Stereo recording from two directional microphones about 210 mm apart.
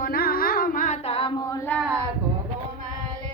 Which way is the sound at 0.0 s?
45° left (ahead or behind).